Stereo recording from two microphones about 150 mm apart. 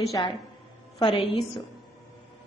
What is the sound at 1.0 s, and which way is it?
Speech, 35° left (ahead or behind).